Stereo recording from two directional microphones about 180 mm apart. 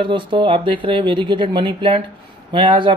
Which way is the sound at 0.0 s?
25° right (ahead or behind).